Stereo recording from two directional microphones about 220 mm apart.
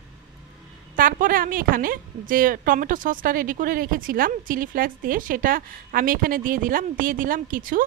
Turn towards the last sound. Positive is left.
turn(degrees=-40)  # may be behind; listen again after turning